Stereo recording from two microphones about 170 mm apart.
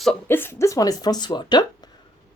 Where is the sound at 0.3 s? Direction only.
15° left (ahead or behind).